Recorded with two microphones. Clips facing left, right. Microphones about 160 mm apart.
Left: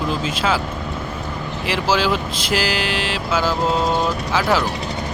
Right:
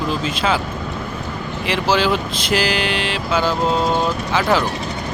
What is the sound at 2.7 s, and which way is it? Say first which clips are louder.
Vehicle: right 1 dB; 60° right (ahead or behind).